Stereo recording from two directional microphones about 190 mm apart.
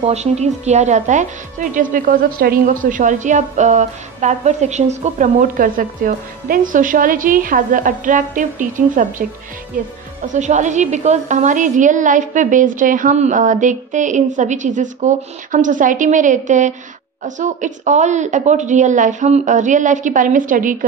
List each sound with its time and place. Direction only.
0.0 s a woman's voice: 35° right (ahead or behind)